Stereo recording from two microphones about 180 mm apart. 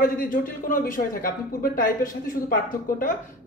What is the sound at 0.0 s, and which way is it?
A woman's voice, 50° left (ahead or behind).